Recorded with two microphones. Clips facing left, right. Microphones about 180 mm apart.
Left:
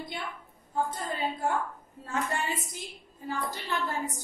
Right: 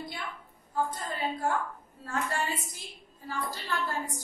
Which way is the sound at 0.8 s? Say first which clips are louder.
Left 1 dB; 25° left (ahead or behind).